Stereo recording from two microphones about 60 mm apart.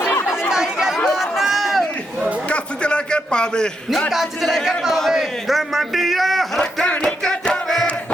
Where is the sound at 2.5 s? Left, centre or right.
Centre.